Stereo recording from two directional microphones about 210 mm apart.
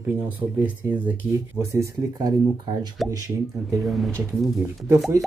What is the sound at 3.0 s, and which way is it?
Speech, centre (ahead or behind).